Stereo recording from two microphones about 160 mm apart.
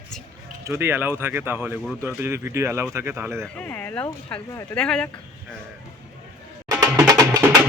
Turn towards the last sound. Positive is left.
turn(degrees=-25)  # may be behind; listen again after turning